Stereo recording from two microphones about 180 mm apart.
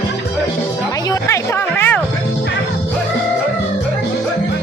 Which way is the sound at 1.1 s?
15° left (ahead or behind).